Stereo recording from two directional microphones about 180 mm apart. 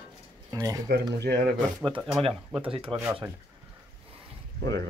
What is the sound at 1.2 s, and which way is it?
Speech, 65° right (ahead or behind).